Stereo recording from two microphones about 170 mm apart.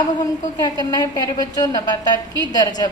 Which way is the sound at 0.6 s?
25° left (ahead or behind).